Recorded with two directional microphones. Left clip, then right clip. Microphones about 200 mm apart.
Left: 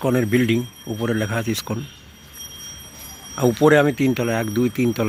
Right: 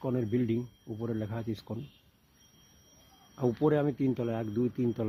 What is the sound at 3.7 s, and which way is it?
Speech, centre (ahead or behind).